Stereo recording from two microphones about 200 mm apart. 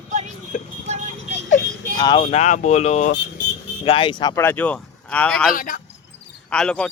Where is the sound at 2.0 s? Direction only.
20° left (ahead or behind).